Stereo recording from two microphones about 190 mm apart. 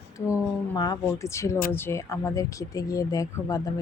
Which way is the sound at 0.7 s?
15° left (ahead or behind).